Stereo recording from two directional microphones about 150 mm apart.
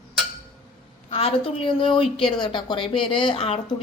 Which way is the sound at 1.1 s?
40° left (ahead or behind).